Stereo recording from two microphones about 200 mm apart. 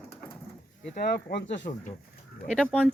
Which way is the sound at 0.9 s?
50° left (ahead or behind).